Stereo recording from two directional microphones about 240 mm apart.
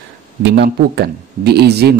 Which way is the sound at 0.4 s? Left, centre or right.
Right.